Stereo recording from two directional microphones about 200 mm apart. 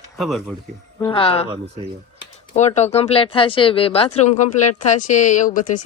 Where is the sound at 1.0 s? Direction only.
25° left (ahead or behind).